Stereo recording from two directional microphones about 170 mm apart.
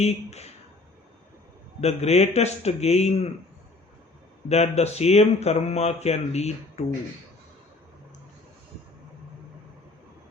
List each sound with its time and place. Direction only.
0.0 s speech: 40° left (ahead or behind)
1.8 s speech: 40° left (ahead or behind)
4.4 s speech: 40° left (ahead or behind)